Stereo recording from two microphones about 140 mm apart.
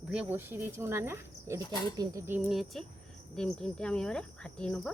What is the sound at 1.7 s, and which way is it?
Speech, 25° left (ahead or behind).